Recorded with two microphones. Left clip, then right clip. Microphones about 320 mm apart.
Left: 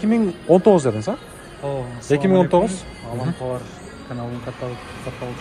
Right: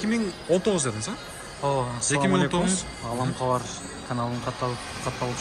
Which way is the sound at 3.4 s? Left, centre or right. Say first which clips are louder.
Right 2 dB; right.